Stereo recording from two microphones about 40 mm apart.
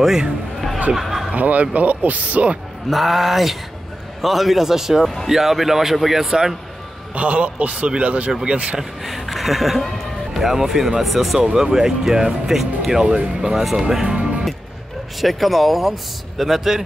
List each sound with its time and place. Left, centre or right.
0.9 s a sound: centre
1.3 s speech: right
2.9 s speech: centre
7.2 s speech: right
9.0 s speech: centre
10.4 s speech: centre
11.3 s speech: centre
12.4 s speech: centre
13.0 s speech: right
13.5 s speech: centre
15.1 s speech: centre